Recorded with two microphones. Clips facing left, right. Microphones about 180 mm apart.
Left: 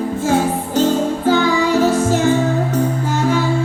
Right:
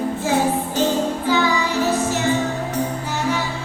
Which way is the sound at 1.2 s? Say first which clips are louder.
Left 7 dB; 50° left (ahead or behind).